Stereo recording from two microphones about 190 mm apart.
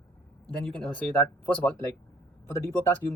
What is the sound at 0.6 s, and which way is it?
Speech, 5° left (ahead or behind).